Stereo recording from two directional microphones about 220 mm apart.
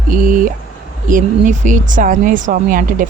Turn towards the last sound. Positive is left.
turn(degrees=-40)  # may be behind; listen again after turning